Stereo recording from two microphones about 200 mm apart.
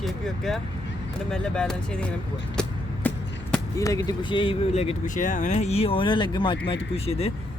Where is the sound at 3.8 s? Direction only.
15° left (ahead or behind).